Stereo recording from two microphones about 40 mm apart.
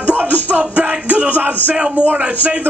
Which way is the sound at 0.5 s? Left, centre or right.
Right.